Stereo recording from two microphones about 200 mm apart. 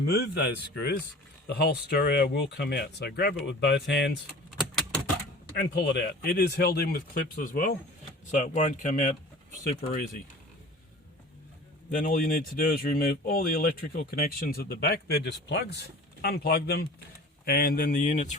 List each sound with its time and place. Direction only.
0.1 s speech: 55° left (ahead or behind)
5.5 s speech: 55° left (ahead or behind); by 9.1 s 35° left (ahead or behind)
11.9 s speech: 40° left (ahead or behind)